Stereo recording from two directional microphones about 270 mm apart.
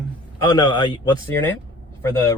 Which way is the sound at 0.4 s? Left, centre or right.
Centre.